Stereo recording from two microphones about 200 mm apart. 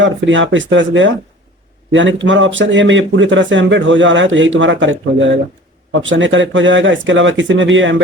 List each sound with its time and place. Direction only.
0.0 s speech: 70° right (ahead or behind)